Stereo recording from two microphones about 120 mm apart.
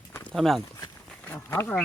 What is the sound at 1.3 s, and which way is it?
Speech, 20° left (ahead or behind).